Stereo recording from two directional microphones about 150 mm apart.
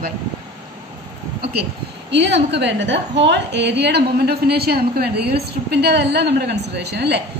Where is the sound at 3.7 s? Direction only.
90° right.